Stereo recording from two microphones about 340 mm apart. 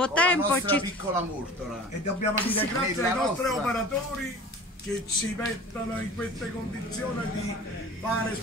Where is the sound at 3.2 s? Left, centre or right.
Centre.